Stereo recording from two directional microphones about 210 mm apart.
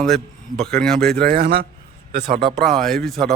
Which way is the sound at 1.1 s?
45° right (ahead or behind).